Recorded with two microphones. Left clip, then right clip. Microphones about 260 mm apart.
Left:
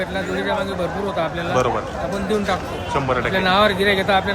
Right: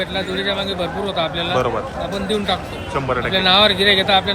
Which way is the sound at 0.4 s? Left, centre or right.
Centre.